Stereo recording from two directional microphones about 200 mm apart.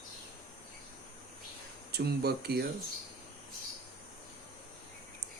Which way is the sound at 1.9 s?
55° right (ahead or behind).